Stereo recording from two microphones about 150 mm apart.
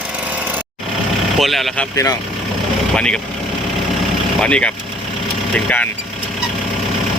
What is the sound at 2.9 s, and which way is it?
Speech, 5° left (ahead or behind).